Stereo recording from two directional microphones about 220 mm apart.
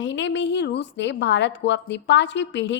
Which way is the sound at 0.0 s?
55° left (ahead or behind).